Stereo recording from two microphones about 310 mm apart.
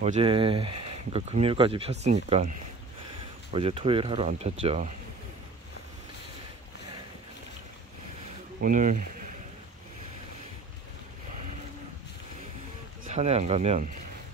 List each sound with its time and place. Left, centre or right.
0.0 s speech: centre
3.5 s speech: centre
8.5 s speech: right
13.0 s speech: right